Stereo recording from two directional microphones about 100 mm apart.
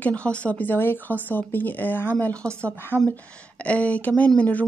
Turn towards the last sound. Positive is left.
turn(degrees=15)  # may be behind; listen again after turning